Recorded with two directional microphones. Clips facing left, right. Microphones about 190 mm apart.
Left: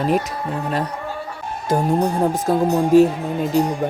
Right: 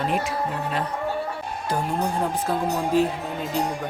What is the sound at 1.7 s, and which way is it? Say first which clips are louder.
Speech: left 8 dB; 45° left (ahead or behind).